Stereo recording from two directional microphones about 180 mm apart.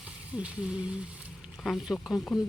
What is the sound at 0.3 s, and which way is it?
Speech, 5° right (ahead or behind).